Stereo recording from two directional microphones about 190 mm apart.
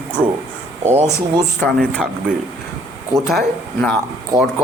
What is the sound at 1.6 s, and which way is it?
Speech, 5° left (ahead or behind).